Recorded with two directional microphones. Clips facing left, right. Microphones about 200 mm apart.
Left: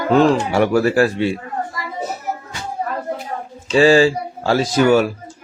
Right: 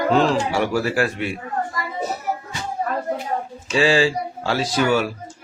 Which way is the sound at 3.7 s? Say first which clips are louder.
Left 6 dB; 45° left (ahead or behind).